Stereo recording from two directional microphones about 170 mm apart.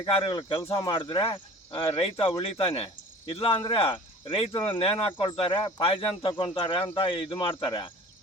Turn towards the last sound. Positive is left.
turn(degrees=25)  # may be behind; listen again after turning